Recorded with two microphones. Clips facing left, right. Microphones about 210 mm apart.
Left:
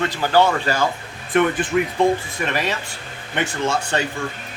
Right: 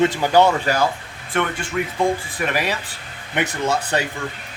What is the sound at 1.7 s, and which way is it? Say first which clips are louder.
Speech: left 3 dB; 25° left (ahead or behind).